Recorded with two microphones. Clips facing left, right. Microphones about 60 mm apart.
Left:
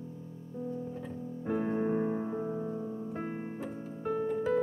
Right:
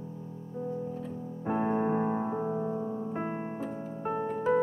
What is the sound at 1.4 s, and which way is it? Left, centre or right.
Piano, right.